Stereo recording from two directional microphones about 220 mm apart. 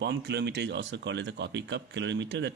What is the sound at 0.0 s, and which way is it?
Speech, 50° right (ahead or behind).